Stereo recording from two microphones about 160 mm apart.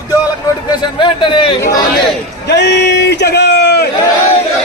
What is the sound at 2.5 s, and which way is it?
A man's voice, 90° left.